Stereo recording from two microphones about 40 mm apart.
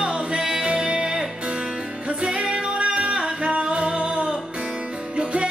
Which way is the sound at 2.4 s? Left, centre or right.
Right.